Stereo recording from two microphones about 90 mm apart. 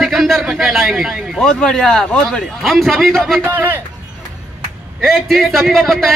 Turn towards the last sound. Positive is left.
turn(degrees=0)  # may be behind; listen again after turning